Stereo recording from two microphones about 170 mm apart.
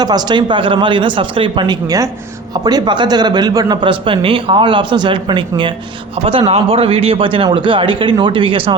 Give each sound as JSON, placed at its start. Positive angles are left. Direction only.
{"t": 0.0, "sound": "a man's voice", "side_deg": -25}